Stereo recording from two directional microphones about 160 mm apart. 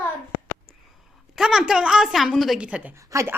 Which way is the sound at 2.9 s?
20° right (ahead or behind).